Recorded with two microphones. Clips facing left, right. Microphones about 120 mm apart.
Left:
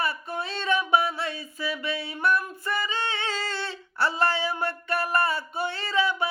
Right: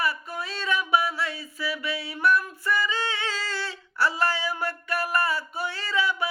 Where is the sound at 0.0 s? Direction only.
25° left (ahead or behind).